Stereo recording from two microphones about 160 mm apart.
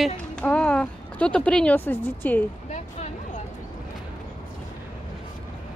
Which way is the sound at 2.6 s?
45° left (ahead or behind).